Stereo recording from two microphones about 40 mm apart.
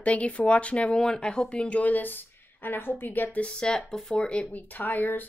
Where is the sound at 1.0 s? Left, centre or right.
Centre; by 3.4 s left.